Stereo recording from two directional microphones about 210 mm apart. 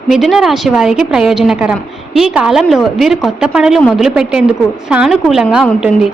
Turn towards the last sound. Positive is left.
turn(degrees=-5)  # may be behind; listen again after turning